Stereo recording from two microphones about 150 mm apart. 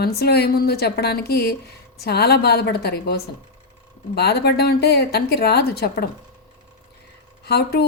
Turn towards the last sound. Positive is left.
turn(degrees=90)